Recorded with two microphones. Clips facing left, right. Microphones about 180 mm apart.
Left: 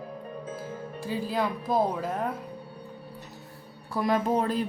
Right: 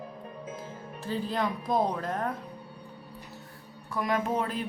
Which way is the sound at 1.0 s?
10° left (ahead or behind).